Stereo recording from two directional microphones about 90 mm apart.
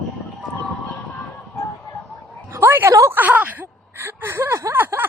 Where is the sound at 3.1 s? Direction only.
20° right (ahead or behind).